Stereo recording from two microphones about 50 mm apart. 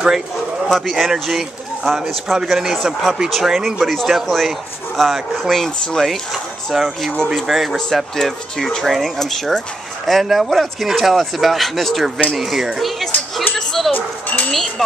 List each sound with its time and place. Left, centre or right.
0.7 s speech: centre
2.8 s speech: centre
13.6 s bow-wow: centre
13.9 s speech: left
14.5 s speech: centre